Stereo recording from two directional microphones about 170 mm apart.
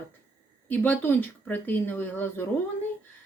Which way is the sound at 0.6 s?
10° left (ahead or behind).